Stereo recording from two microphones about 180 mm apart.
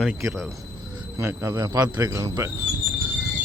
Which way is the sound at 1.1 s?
15° right (ahead or behind).